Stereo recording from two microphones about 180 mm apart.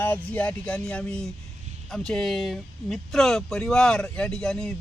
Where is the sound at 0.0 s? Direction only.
10° left (ahead or behind).